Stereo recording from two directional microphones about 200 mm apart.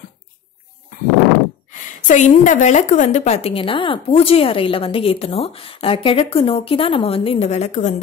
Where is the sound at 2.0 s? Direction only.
35° left (ahead or behind).